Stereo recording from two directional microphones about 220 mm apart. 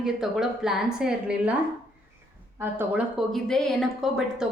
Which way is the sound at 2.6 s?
10° right (ahead or behind).